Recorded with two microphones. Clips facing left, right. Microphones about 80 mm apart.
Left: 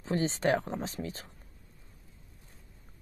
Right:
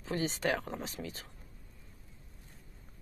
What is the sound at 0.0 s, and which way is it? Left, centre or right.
A woman's voice, left.